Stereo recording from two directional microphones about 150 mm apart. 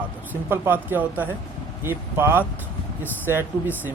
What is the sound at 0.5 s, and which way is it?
Speech, 15° right (ahead or behind).